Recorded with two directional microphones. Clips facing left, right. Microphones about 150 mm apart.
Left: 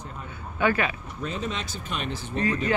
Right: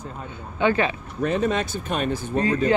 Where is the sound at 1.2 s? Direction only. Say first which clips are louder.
Right 9 dB; 60° right (ahead or behind).